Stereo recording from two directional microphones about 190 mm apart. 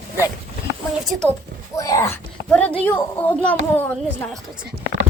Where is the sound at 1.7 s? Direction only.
15° left (ahead or behind).